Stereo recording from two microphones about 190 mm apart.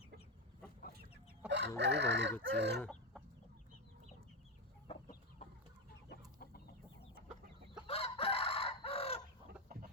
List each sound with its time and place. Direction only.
1.5 s chicken: 65° right (ahead or behind)
2.8 s chicken: 5° left (ahead or behind)
4.9 s chicken: 35° left (ahead or behind)
6.1 s chicken: 55° left (ahead or behind)
7.9 s chicken: 30° left (ahead or behind)